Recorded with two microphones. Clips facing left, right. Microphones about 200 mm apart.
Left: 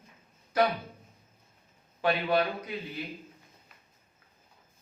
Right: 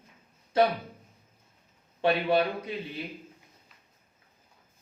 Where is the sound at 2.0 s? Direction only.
25° right (ahead or behind).